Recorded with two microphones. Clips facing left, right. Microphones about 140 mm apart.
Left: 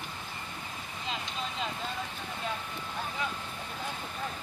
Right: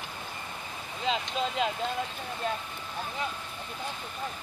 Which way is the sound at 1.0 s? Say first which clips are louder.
Right 8 dB; 90° right.